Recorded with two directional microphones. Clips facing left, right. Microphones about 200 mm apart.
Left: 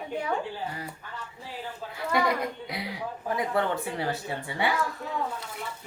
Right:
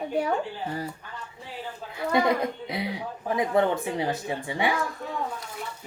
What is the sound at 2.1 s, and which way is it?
A woman's voice, 20° right (ahead or behind).